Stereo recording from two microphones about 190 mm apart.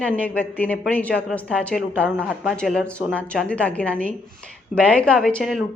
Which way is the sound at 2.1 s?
10° right (ahead or behind).